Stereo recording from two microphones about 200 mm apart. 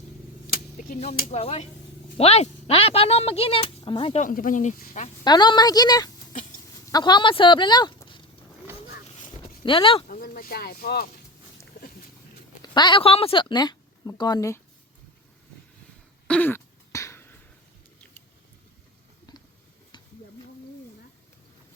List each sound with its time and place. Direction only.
0.8 s speech: 35° left (ahead or behind)
4.2 s speech: 40° left (ahead or behind)
5.2 s speech: 20° left (ahead or behind)
9.0 s dog: 35° left (ahead or behind)
9.6 s speech: 25° left (ahead or behind)
10.1 s speech: 45° left (ahead or behind)
12.7 s a woman's voice: 20° left (ahead or behind)
16.2 s throat clearing: 5° left (ahead or behind)
19.3 s a sound: 20° left (ahead or behind)